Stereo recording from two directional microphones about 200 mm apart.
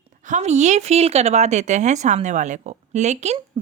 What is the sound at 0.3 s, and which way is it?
Speech, 35° right (ahead or behind).